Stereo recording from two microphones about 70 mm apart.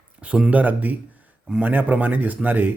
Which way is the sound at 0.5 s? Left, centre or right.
Right.